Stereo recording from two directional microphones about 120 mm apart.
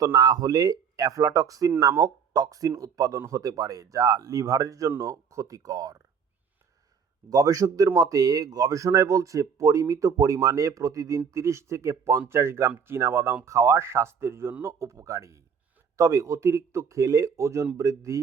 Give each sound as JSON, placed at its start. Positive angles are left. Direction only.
{"t": 0.0, "sound": "speech", "side_deg": -35}
{"t": 7.3, "sound": "speech", "side_deg": -30}